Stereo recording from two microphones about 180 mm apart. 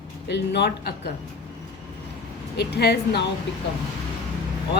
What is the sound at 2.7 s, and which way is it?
Speech, 65° left (ahead or behind).